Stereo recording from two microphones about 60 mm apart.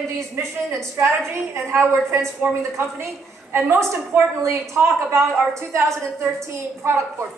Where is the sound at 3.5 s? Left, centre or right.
Right.